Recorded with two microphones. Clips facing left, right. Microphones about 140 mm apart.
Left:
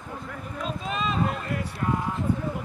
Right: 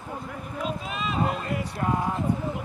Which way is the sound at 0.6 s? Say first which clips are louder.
Left 2 dB; 5° right (ahead or behind).